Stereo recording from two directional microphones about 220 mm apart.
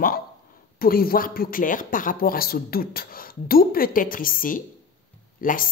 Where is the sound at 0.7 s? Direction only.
40° left (ahead or behind).